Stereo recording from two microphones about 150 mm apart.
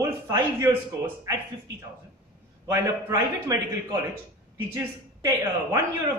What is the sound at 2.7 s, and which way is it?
A man's voice, 20° right (ahead or behind).